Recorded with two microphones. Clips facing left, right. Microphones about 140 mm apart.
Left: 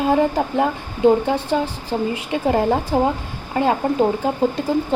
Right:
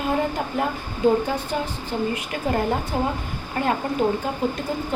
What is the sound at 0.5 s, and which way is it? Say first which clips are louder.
Speech: left 5 dB; 25° left (ahead or behind).